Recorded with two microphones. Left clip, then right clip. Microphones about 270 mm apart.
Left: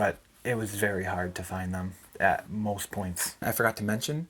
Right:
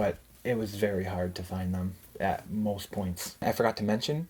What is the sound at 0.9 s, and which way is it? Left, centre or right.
Speech, centre.